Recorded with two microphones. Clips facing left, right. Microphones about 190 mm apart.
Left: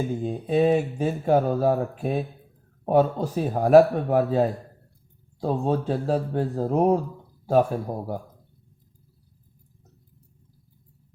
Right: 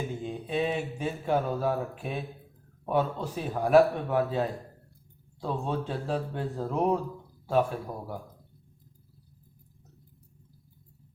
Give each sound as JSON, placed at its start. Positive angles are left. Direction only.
{"t": 0.2, "sound": "speech", "side_deg": 40}